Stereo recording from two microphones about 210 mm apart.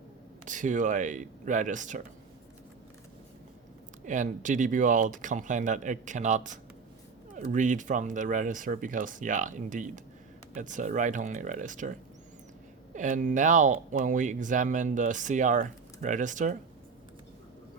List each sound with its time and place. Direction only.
0.4 s speech: 35° right (ahead or behind)
4.0 s speech: 35° right (ahead or behind)